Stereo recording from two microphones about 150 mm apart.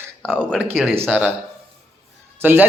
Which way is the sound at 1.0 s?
5° right (ahead or behind).